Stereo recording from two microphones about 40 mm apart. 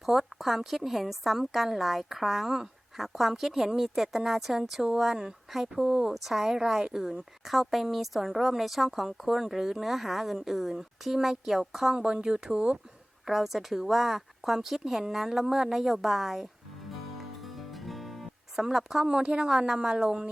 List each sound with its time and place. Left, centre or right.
0.0 s a woman's voice: centre; by 12.8 s right
13.2 s a woman's voice: centre
17.8 s music: centre
18.6 s speech: centre